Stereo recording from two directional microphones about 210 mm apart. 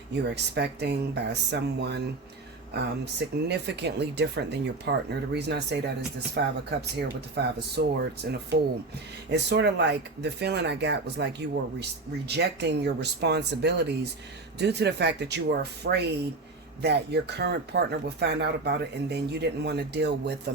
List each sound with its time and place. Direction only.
0.1 s speech: 55° right (ahead or behind)
3.0 s speech: 55° right (ahead or behind)